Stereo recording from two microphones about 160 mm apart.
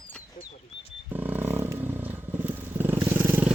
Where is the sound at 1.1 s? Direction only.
10° right (ahead or behind).